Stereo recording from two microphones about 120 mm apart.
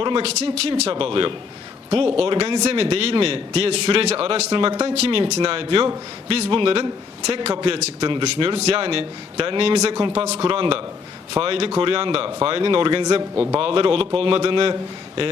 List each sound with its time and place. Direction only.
0.0 s a man's voice: 50° right (ahead or behind)
9.9 s a man's voice: 40° right (ahead or behind)